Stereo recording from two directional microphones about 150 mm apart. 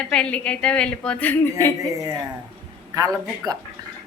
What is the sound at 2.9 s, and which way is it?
Speech, 25° right (ahead or behind).